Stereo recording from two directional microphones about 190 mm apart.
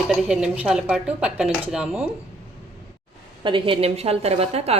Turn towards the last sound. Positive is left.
turn(degrees=-35)  # may be behind; listen again after turning